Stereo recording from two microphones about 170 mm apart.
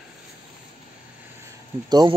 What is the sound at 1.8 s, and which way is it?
Speech, 25° right (ahead or behind).